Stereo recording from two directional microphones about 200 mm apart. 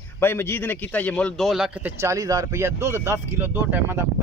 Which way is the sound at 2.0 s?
15° right (ahead or behind).